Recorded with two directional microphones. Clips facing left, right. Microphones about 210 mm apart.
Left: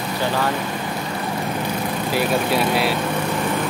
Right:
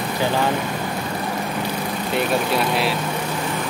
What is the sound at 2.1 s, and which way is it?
Speech, centre (ahead or behind).